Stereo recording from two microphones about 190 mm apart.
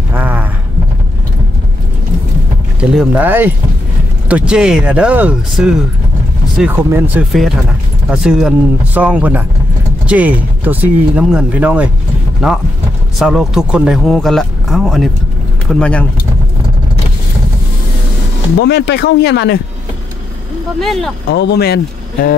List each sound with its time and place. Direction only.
0.1 s clip-clop: 10° right (ahead or behind)
2.8 s speech: 5° right (ahead or behind)
18.6 s speech: 60° left (ahead or behind)
20.8 s speech: centre (ahead or behind)
21.3 s speech: 55° left (ahead or behind)